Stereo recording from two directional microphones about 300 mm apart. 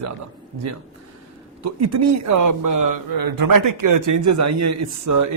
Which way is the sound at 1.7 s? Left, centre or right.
Right.